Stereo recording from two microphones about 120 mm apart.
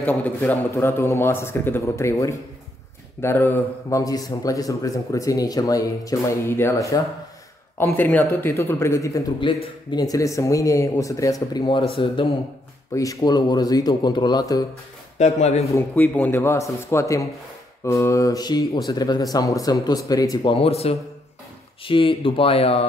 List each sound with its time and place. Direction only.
0.0 s a man's voice: 15° left (ahead or behind)
9.4 s a man's voice: 40° left (ahead or behind)
11.8 s speech: 45° left (ahead or behind)
12.9 s speech: 30° left (ahead or behind)
15.1 s a man's voice: 70° left (ahead or behind)
15.9 s a man's voice: 15° left (ahead or behind); by 20.3 s 30° left (ahead or behind)
20.4 s speech: 55° left (ahead or behind)
21.8 s speech: 45° left (ahead or behind)